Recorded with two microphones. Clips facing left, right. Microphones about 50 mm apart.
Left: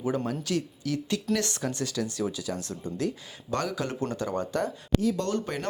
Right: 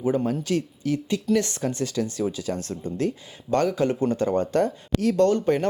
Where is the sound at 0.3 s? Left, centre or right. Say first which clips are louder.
Right 5 dB; right.